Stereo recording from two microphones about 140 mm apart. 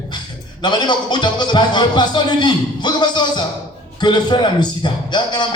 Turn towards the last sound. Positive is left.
turn(degrees=30)  # may be behind; listen again after turning